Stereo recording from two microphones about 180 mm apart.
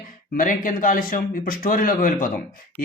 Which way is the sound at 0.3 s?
50° left (ahead or behind).